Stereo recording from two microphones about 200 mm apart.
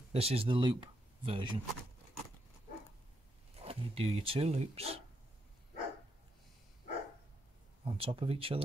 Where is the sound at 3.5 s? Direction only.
30° right (ahead or behind).